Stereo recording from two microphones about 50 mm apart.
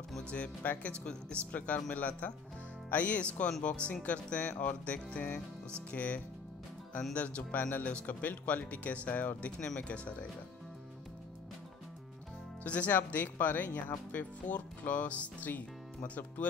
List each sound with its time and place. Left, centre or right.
0.2 s speech: left
7.5 s speech: left
7.8 s speech: left
12.6 s speech: left
14.5 s speech: left